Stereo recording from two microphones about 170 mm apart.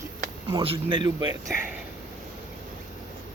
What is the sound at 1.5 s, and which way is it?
Speech, 10° right (ahead or behind).